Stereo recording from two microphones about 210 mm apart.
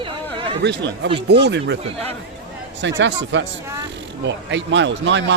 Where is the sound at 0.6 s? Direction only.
55° right (ahead or behind).